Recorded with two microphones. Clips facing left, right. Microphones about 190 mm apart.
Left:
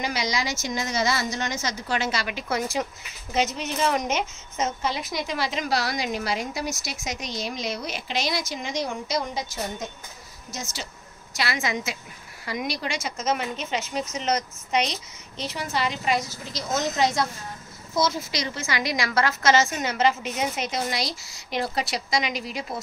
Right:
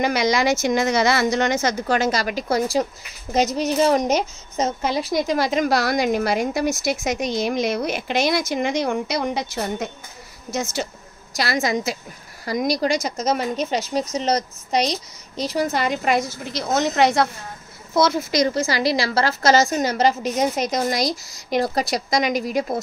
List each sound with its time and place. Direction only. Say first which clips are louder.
0.0 s a woman's voice: right 8 dB; 55° right (ahead or behind)
10.5 s a woman's voice: right 11 dB; 55° right (ahead or behind)
11.3 s a woman's voice: right 6 dB; 40° right (ahead or behind); by 18.2 s 65° right (ahead or behind)
18.3 s a woman's voice: right 9 dB; 40° right (ahead or behind)